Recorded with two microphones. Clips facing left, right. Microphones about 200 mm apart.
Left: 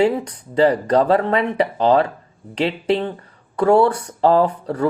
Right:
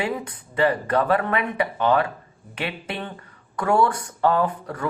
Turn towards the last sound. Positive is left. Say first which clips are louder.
# left 7 dB
turn(degrees=30)  # may be behind; listen again after turning